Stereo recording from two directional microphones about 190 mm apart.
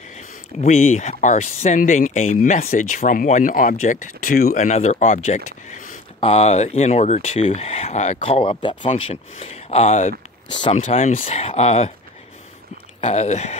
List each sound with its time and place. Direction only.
0.6 s speech: 40° left (ahead or behind)
4.6 s speech: 35° left (ahead or behind)
13.0 s speech: 35° left (ahead or behind)